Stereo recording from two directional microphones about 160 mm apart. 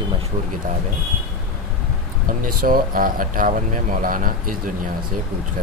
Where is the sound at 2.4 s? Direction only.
60° right (ahead or behind).